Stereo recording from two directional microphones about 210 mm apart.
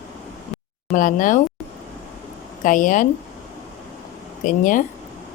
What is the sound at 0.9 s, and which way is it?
Speech, 40° left (ahead or behind).